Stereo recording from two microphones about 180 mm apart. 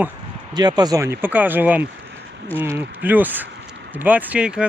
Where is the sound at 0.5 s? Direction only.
25° right (ahead or behind).